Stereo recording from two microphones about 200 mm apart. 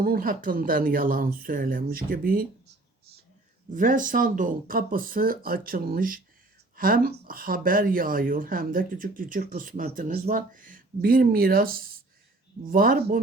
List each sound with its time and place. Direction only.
0.0 s speech: 45° right (ahead or behind)
3.7 s speech: 40° right (ahead or behind)